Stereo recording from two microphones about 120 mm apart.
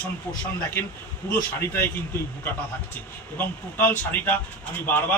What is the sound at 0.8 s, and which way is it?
Speech, 20° left (ahead or behind).